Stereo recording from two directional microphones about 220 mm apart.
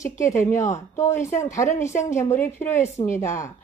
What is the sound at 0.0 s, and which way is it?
Speech, 15° left (ahead or behind).